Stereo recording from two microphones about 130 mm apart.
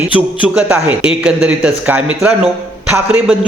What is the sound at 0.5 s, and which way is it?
A man's voice, 10° right (ahead or behind).